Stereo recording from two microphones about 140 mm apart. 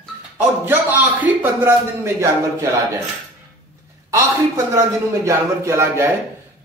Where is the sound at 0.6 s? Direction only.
15° right (ahead or behind).